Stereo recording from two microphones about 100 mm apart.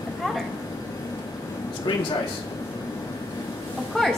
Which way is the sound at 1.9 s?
55° left (ahead or behind).